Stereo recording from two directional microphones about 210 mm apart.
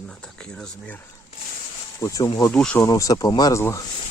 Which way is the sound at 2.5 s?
5° left (ahead or behind).